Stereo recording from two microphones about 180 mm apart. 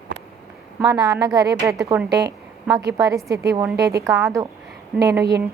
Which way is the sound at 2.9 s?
20° right (ahead or behind).